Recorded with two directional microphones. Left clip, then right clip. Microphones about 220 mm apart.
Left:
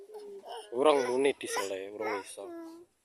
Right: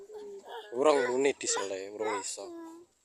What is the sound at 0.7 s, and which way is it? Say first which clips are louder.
Speech: even; centre (ahead or behind).